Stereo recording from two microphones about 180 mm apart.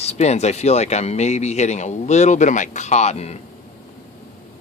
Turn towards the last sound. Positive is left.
turn(degrees=40)  # may be behind; listen again after turning